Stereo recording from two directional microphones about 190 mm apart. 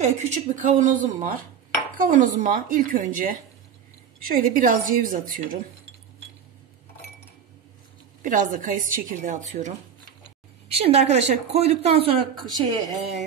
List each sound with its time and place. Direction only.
0.0 s a woman's voice: 40° right (ahead or behind)
8.2 s a woman's voice: 45° right (ahead or behind); by 12.8 s 20° right (ahead or behind)